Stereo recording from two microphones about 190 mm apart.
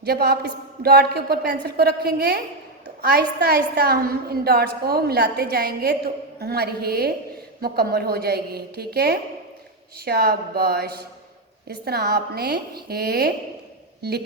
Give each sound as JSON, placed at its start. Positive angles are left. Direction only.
{"t": 0.0, "sound": "a woman's voice", "side_deg": -60}